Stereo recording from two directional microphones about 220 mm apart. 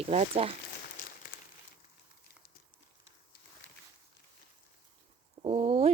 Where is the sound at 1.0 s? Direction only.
35° left (ahead or behind).